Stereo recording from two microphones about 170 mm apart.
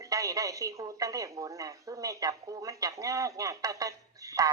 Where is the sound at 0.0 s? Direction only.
20° right (ahead or behind).